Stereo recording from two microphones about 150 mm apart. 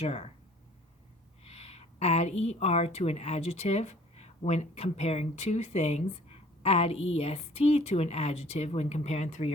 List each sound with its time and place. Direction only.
0.0 s a woman's voice: 45° left (ahead or behind)
1.5 s a woman's voice: 45° left (ahead or behind)